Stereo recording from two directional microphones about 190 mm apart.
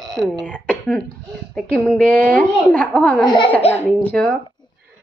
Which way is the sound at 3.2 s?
25° left (ahead or behind).